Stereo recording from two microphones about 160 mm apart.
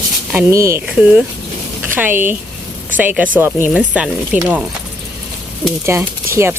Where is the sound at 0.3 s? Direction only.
20° right (ahead or behind).